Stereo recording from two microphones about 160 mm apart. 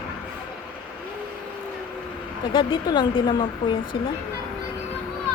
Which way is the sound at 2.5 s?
30° left (ahead or behind).